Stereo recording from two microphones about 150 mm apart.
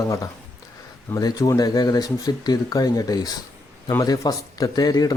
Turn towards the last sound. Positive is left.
turn(degrees=25)  # may be behind; listen again after turning